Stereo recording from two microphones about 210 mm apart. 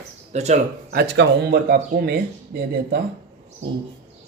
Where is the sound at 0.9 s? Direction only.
50° right (ahead or behind).